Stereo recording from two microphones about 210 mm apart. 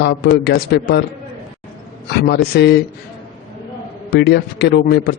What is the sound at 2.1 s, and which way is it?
Speech, 50° left (ahead or behind).